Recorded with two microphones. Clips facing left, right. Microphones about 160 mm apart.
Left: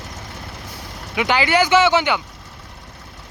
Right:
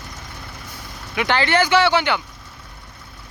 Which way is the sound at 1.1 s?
15° left (ahead or behind).